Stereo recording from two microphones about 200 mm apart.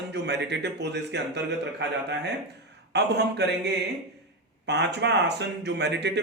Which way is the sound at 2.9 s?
55° right (ahead or behind).